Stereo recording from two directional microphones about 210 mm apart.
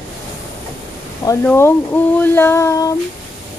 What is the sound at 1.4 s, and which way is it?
A woman's voice, 10° left (ahead or behind).